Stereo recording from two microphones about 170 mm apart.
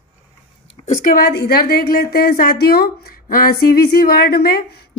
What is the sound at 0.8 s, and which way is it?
A woman's voice, 55° left (ahead or behind).